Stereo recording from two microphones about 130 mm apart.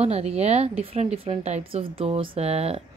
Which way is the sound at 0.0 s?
55° right (ahead or behind).